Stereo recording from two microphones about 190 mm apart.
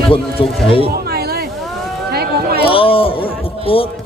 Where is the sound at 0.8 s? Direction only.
55° right (ahead or behind).